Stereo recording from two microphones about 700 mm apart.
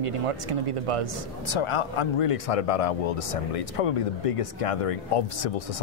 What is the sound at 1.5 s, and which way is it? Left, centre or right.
Speech, left.